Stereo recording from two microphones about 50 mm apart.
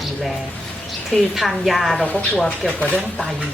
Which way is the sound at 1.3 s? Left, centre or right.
Centre.